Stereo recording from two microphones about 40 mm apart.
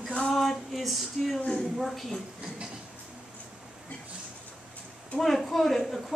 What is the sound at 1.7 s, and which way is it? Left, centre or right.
Speech, centre.